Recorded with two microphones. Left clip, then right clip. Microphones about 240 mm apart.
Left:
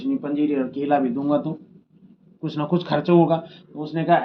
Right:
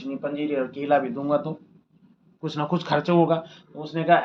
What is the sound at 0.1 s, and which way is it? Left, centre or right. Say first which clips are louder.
Speech: left 4 dB; right.